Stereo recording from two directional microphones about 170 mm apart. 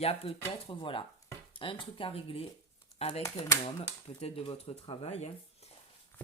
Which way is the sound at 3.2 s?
15° left (ahead or behind).